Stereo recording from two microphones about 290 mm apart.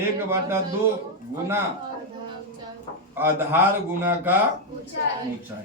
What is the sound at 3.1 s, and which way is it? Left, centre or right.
A man's voice, centre.